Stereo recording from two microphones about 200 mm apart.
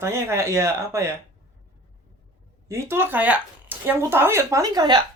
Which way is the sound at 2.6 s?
15° right (ahead or behind).